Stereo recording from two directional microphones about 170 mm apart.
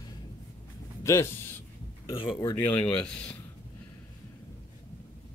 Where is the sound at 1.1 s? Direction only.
15° left (ahead or behind).